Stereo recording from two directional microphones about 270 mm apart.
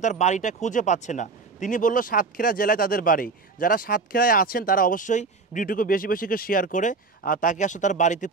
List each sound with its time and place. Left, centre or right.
0.0 s speech: left